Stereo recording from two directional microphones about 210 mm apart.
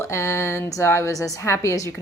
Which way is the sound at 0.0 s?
15° left (ahead or behind).